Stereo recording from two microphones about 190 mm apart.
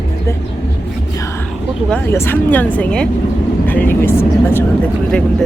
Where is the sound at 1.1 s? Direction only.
15° left (ahead or behind).